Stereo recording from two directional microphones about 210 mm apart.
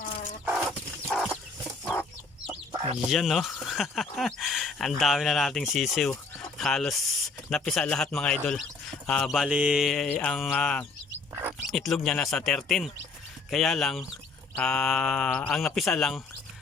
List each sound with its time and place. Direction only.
1.0 s chicken: centre (ahead or behind)
2.7 s chicken: 25° right (ahead or behind)
3.1 s speech: centre (ahead or behind)